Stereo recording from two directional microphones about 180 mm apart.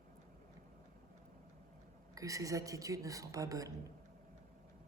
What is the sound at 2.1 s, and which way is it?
A man's voice, 20° right (ahead or behind).